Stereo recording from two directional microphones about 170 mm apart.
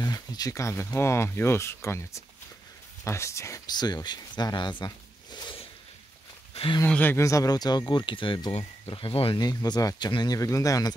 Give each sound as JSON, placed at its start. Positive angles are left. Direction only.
{"t": 0.0, "sound": "speech", "side_deg": 20}
{"t": 6.5, "sound": "a sound", "side_deg": 30}
{"t": 6.8, "sound": "speech", "side_deg": 10}